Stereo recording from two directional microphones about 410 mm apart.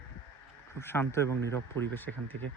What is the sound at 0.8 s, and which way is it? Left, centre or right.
Speech, centre.